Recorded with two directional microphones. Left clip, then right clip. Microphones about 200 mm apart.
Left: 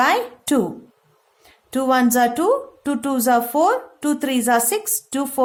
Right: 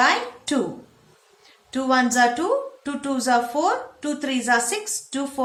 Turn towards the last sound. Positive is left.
turn(degrees=55)  # may be behind; listen again after turning